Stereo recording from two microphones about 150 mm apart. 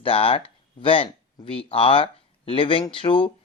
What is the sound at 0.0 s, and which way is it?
Speech, 40° left (ahead or behind).